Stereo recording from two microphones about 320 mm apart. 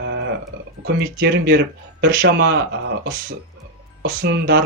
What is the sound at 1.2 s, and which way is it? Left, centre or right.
Speech, right.